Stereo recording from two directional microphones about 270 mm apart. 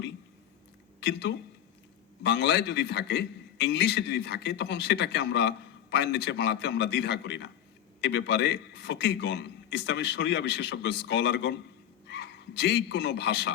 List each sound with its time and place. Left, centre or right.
0.9 s a woman's voice: left